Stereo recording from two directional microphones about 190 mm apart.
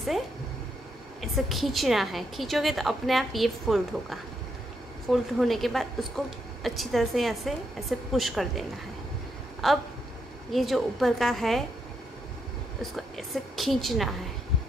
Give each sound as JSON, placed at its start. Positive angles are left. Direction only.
{"t": 1.2, "sound": "a woman's voice", "side_deg": 0}
{"t": 12.9, "sound": "a woman's voice", "side_deg": 0}